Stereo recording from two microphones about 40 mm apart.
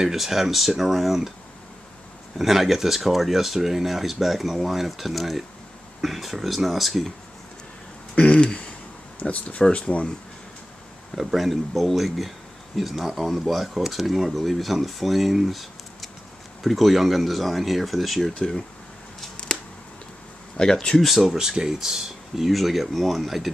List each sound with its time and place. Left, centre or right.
0.0 s speech: centre
2.3 s speech: centre
8.1 s a sound: left
9.3 s speech: left
11.1 s speech: centre
18.3 s speech: centre
20.6 s speech: left
21.0 s speech: centre
21.4 s speech: centre